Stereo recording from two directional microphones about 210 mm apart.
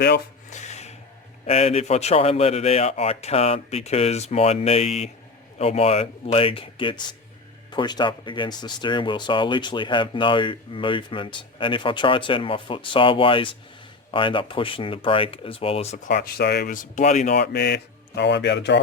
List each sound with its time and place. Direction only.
0.5 s rub: 35° left (ahead or behind)
1.5 s speech: 30° left (ahead or behind)
16.1 s speech: 50° left (ahead or behind); by 17.3 s 35° left (ahead or behind)
17.3 s speech: 50° left (ahead or behind)